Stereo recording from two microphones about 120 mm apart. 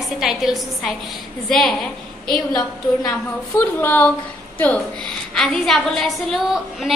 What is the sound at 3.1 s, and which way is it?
A woman's voice, 15° left (ahead or behind).